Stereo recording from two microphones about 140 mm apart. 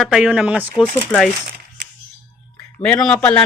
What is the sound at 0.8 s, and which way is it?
Speech, 10° left (ahead or behind).